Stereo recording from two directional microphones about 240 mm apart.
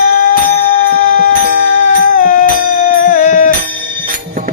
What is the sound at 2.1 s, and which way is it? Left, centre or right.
Music, left.